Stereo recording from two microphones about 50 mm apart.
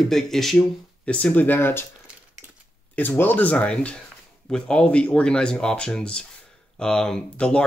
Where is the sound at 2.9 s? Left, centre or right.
Left.